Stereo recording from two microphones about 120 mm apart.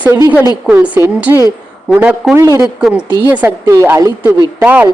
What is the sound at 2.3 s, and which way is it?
Speech, 25° right (ahead or behind).